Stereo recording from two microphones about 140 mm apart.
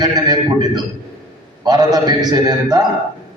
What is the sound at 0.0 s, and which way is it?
A man's voice, 30° right (ahead or behind).